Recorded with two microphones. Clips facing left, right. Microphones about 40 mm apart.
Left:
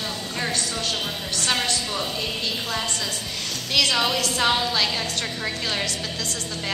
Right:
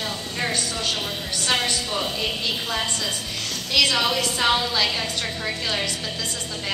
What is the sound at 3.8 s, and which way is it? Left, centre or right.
A man's voice, centre.